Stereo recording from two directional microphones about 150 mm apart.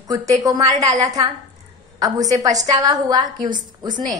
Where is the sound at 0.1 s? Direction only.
25° right (ahead or behind).